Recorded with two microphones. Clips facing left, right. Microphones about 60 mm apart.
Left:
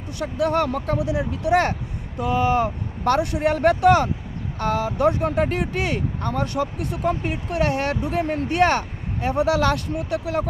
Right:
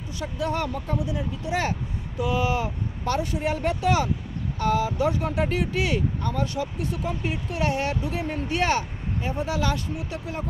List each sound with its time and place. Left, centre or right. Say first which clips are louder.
0.2 s speech: left 6 dB; left
2.1 s speech: left 5 dB; left
3.0 s speech: left 6 dB; left
9.2 s speech: left 8 dB; left